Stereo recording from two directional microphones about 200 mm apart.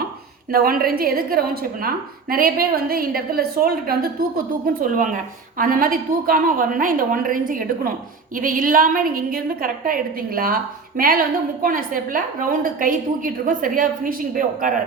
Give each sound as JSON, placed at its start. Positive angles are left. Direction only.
{"t": 0.5, "sound": "a woman's voice", "side_deg": -45}